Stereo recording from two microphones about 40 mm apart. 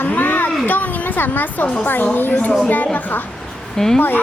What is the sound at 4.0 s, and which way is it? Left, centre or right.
Speech, left.